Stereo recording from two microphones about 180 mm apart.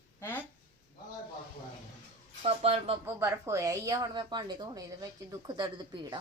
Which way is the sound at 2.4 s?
35° right (ahead or behind).